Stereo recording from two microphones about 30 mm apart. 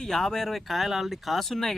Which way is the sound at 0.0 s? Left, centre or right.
Centre.